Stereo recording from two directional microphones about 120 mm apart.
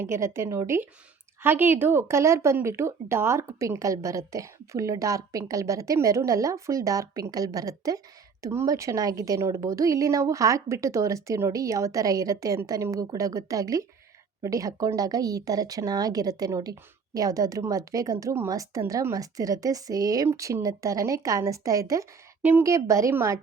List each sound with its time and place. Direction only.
0.0 s a woman's voice: 20° right (ahead or behind)